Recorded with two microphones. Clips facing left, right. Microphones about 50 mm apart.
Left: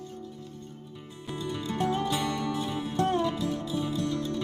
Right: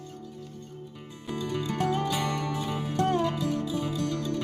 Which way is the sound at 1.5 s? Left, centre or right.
Right.